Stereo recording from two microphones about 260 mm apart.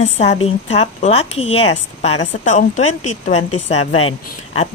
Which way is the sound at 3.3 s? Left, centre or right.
Left.